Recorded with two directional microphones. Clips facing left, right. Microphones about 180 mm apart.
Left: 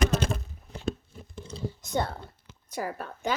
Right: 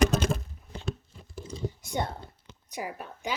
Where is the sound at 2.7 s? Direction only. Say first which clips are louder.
Left 3 dB; 15° right (ahead or behind).